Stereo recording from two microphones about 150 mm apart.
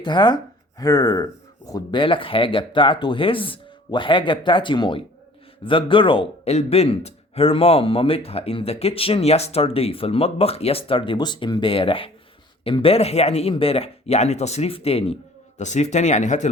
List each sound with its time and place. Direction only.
0.0 s speech: 30° left (ahead or behind); by 16.5 s 50° left (ahead or behind)